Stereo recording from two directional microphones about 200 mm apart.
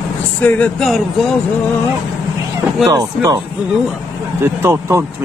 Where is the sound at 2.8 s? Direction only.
15° right (ahead or behind).